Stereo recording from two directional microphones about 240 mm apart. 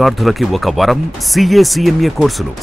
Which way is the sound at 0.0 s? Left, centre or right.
Centre.